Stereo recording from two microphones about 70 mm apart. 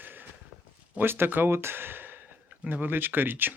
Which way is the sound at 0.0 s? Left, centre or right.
Right.